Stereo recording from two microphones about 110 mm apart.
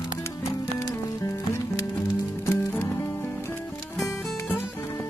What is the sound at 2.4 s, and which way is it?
Music, 20° left (ahead or behind).